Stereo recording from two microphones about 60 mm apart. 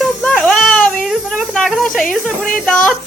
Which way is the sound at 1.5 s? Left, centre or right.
Centre.